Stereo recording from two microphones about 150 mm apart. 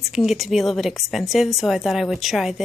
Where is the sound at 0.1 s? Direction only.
Centre (ahead or behind).